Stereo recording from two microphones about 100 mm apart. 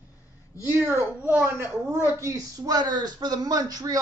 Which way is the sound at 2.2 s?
35° right (ahead or behind).